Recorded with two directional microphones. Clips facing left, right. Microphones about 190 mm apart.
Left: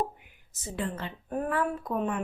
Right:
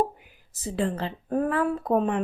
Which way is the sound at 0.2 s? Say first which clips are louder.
Right 10 dB; 35° right (ahead or behind).